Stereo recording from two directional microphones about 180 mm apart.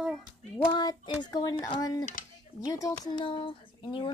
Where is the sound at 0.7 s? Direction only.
25° left (ahead or behind).